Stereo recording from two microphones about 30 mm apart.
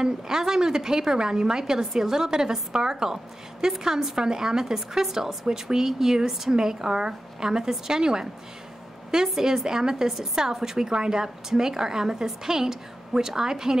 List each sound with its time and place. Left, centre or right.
0.0 s a woman's voice: right
9.3 s a woman's voice: centre